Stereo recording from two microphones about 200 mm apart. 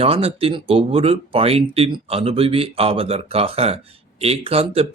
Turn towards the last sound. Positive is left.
turn(degrees=-30)  # may be behind; listen again after turning